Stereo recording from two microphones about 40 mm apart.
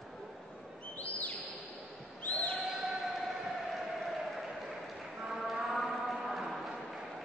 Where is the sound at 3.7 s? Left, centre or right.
Centre.